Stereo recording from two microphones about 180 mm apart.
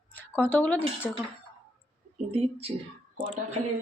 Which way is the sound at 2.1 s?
35° right (ahead or behind).